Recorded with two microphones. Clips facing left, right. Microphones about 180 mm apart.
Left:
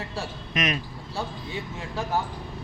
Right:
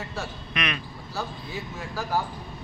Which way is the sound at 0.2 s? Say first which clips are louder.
Left 3 dB; 40° left (ahead or behind).